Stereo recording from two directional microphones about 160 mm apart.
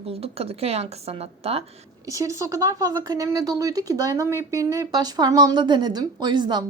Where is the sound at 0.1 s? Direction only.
40° right (ahead or behind).